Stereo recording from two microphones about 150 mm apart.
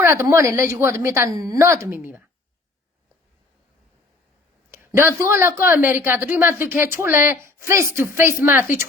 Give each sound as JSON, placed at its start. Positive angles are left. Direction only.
{"t": 0.0, "sound": "a woman's voice", "side_deg": -15}
{"t": 4.7, "sound": "a woman's voice", "side_deg": -15}